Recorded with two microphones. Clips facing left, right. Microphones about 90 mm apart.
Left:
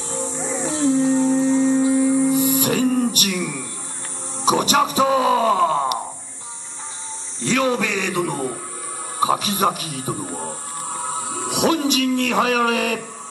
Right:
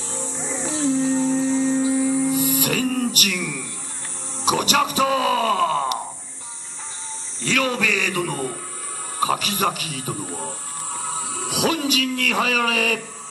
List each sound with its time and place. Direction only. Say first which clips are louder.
0.1 s music: left 4 dB; centre (ahead or behind)
2.4 s music: left 3 dB; 25° left (ahead or behind)
4.5 s groan: left 3 dB; 25° left (ahead or behind)
7.4 s a sound: left 3 dB; 20° left (ahead or behind)
7.8 s a man's voice: left 1 dB; 20° left (ahead or behind)
11.5 s speech: left 3 dB; 25° left (ahead or behind)